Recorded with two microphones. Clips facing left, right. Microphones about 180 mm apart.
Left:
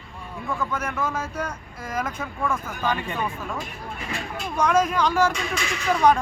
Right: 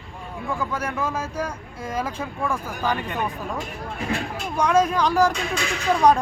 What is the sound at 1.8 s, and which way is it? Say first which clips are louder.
Speech: right 1 dB; 30° right (ahead or behind).